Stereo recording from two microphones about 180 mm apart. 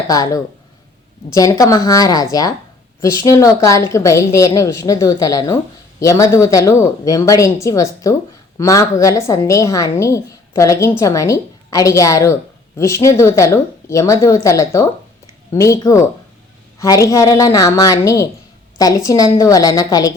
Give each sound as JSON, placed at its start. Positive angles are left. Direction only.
{"t": 0.1, "sound": "a woman's voice", "side_deg": 20}